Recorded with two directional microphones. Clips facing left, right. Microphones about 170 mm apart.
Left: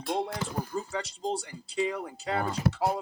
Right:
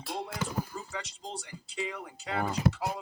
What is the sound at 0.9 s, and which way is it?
Speech, 30° left (ahead or behind).